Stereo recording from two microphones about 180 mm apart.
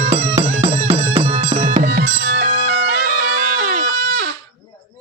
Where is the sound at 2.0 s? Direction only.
55° right (ahead or behind).